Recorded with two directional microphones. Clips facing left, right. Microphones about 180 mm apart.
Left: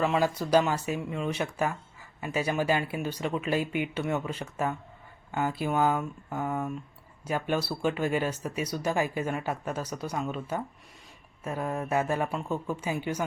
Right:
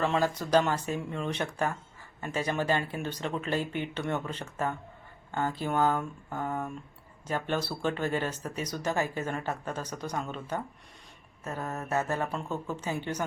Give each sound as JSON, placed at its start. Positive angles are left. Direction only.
{"t": 0.0, "sound": "speech", "side_deg": 5}